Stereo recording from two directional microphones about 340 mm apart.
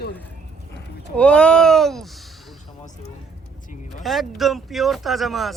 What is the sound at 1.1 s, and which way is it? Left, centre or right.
Speech, centre.